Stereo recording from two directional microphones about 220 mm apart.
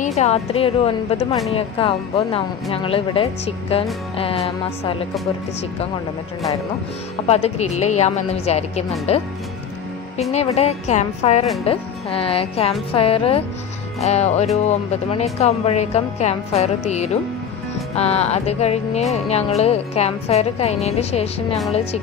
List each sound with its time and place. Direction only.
0.0 s a woman's voice: 30° left (ahead or behind)
7.2 s a woman's voice: 30° left (ahead or behind)
10.3 s a woman's voice: 30° left (ahead or behind)